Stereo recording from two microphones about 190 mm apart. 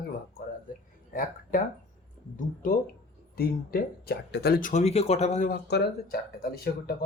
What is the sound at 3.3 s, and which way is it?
Speech, 50° left (ahead or behind).